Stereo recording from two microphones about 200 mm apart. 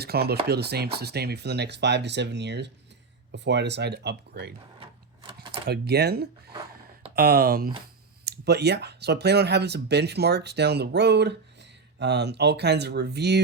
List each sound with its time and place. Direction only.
0.0 s speech: 50° right (ahead or behind)
4.8 s a sound: 25° right (ahead or behind)
5.5 s speech: 55° right (ahead or behind)